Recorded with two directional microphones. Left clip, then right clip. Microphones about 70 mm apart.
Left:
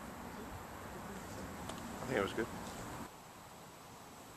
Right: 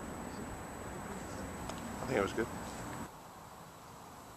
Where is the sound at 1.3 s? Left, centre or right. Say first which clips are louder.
Right 3 dB; right.